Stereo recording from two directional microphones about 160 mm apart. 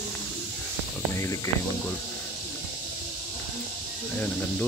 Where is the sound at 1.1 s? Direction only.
20° left (ahead or behind).